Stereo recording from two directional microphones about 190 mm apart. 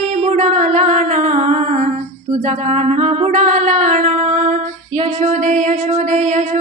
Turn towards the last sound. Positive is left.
turn(degrees=-40)  # may be behind; listen again after turning